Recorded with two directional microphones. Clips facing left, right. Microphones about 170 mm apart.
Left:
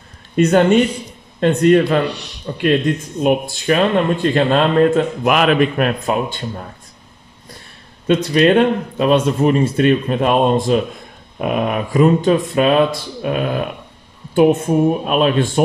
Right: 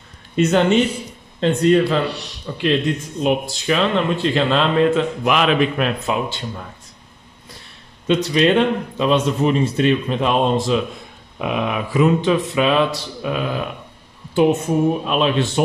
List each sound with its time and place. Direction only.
0.4 s speech: 55° left (ahead or behind)
2.0 s a man's voice: centre (ahead or behind)
2.4 s speech: 50° left (ahead or behind)
8.1 s speech: 50° left (ahead or behind)
15.0 s speech: 50° left (ahead or behind)